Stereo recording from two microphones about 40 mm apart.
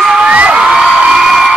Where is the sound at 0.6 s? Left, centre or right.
Centre.